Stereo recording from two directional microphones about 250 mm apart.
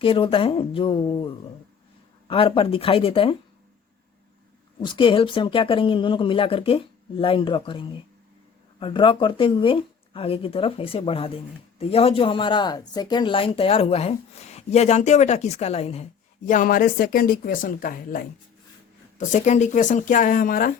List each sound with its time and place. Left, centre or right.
0.0 s speech: left
4.8 s speech: centre
19.3 s speech: left